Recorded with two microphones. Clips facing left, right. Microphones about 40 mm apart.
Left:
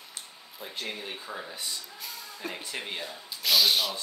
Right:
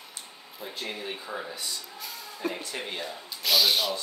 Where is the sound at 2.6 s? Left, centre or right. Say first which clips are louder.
Right 1 dB; centre.